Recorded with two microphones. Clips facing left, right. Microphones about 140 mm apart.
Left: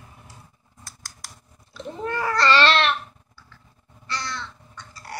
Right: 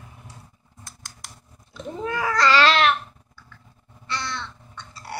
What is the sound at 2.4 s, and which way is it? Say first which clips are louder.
Babbling: right 1 dB; 10° right (ahead or behind).